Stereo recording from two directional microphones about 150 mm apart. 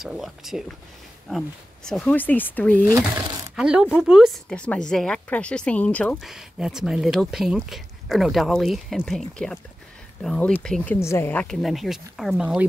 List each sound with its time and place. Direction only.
0.0 s speech: 5° right (ahead or behind)
1.9 s speech: 5° left (ahead or behind)
2.9 s speech: 25° right (ahead or behind)
3.5 s speech: 5° right (ahead or behind); by 6.1 s 10° left (ahead or behind)
6.1 s speech: 5° right (ahead or behind)
10.2 s speech: 5° left (ahead or behind)
11.0 s speech: 15° left (ahead or behind)
11.6 s speech: centre (ahead or behind)